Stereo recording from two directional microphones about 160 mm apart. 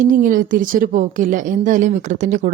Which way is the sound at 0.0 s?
55° right (ahead or behind).